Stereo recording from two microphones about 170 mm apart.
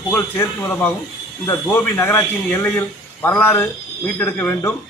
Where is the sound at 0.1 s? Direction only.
15° left (ahead or behind).